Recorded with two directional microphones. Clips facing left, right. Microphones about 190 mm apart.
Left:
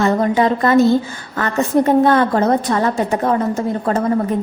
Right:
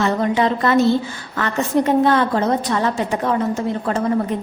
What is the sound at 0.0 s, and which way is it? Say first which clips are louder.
Speech: left 3 dB; 40° left (ahead or behind).